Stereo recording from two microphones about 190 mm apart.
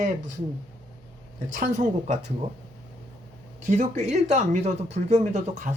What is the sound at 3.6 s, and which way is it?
Speech, 40° right (ahead or behind).